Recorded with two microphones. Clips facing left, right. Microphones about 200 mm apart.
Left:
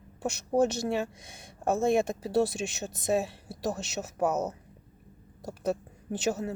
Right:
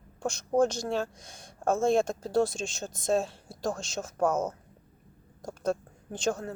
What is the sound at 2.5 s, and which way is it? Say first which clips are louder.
Speech: left 2 dB; 65° left (ahead or behind).